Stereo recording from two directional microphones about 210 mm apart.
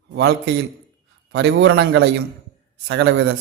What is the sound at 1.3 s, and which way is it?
A man's voice, 60° right (ahead or behind).